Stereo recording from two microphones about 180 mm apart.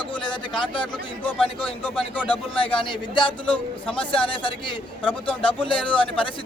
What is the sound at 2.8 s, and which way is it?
Speech, 25° left (ahead or behind).